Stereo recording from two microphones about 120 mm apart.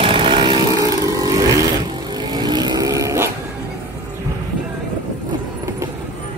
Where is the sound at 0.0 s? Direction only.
50° right (ahead or behind); by 3.3 s 25° right (ahead or behind).